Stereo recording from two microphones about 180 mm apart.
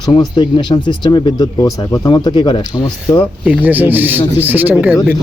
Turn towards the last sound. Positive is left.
turn(degrees=-5)  # may be behind; listen again after turning